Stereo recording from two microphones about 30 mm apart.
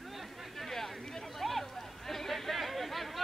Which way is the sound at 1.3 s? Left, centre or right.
Centre.